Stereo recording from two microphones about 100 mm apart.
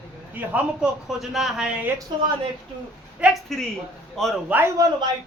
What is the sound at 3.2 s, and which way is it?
Speech, 15° right (ahead or behind).